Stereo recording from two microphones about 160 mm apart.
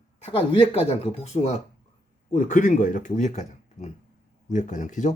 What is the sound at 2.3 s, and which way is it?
Speech, 55° left (ahead or behind).